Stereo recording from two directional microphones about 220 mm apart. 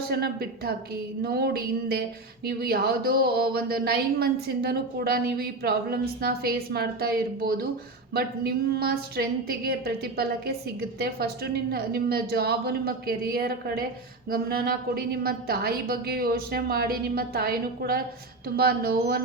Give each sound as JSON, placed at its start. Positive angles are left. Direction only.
{"t": 0.1, "sound": "speech", "side_deg": -45}